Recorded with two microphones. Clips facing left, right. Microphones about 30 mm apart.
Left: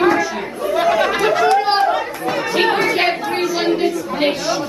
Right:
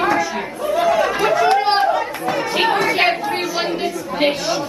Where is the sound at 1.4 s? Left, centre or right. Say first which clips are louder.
Left 1 dB; centre.